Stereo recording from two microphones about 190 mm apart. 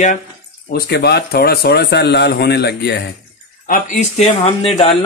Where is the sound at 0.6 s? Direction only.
55° left (ahead or behind).